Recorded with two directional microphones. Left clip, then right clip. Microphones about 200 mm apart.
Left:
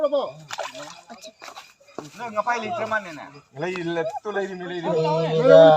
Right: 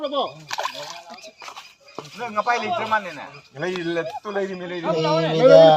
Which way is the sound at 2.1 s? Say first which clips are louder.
Right 3 dB; 40° right (ahead or behind).